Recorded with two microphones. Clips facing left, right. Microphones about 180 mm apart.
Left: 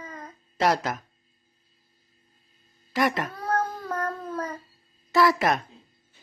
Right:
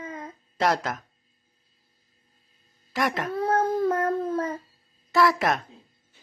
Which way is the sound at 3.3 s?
25° right (ahead or behind).